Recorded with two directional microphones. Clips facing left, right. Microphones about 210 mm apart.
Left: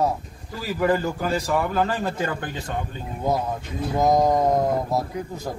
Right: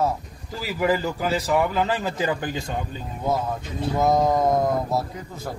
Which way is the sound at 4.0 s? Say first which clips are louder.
Left 1 dB; 15° left (ahead or behind).